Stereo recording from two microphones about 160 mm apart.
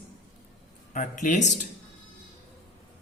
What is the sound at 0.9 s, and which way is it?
Speech, 55° left (ahead or behind).